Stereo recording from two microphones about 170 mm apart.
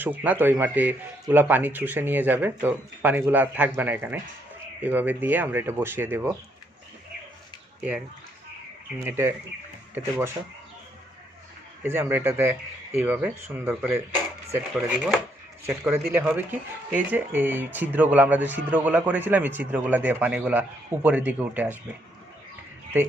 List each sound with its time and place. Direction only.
0.0 s speech: 10° right (ahead or behind)
7.8 s speech: 5° right (ahead or behind)
9.0 s speech: 15° right (ahead or behind)
11.8 s speech: 10° right (ahead or behind)